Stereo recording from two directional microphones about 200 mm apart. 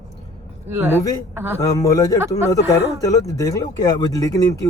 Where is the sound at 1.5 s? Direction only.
15° left (ahead or behind).